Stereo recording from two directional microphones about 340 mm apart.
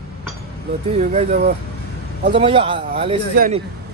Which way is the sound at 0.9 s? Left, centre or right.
Right.